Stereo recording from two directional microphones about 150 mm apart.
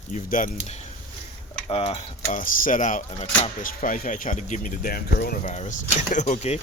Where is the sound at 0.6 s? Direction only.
45° left (ahead or behind).